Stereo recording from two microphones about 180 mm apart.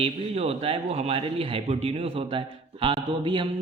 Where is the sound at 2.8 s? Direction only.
25° right (ahead or behind).